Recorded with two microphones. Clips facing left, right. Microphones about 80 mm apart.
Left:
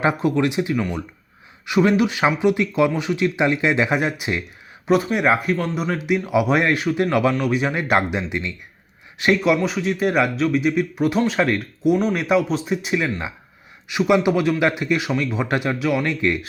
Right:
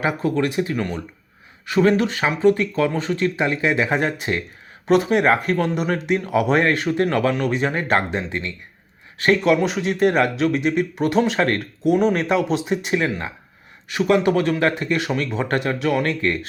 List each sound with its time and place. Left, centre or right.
0.0 s speech: left
0.7 s speech: centre
1.6 s speech: centre
3.9 s speech: centre
9.6 s speech: centre
13.9 s speech: centre
16.0 s speech: centre